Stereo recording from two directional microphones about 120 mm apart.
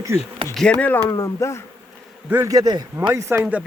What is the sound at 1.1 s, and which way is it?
Speech, 25° left (ahead or behind).